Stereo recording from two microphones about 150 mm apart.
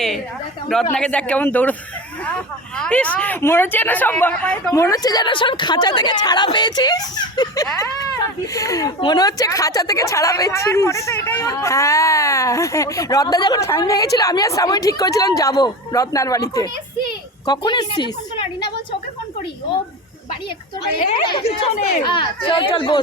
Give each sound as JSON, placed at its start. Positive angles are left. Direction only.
{"t": 0.9, "sound": "speech", "side_deg": 5}
{"t": 4.7, "sound": "a woman's voice", "side_deg": 20}
{"t": 21.2, "sound": "speech", "side_deg": 30}